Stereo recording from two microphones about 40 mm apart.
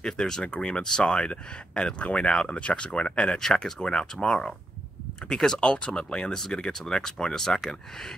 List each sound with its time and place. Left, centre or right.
0.0 s speech: centre